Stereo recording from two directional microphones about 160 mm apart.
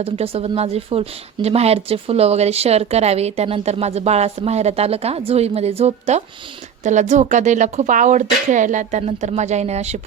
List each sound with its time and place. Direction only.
0.0 s speech: 40° right (ahead or behind)